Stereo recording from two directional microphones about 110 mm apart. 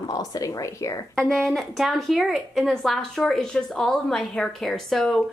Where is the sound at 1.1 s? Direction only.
5° left (ahead or behind).